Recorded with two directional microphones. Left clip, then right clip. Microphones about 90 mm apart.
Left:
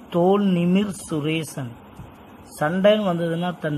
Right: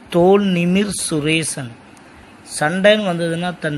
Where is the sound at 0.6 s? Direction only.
25° right (ahead or behind).